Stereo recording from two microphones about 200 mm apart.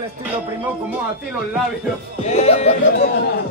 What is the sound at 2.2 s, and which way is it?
Speech, 30° left (ahead or behind).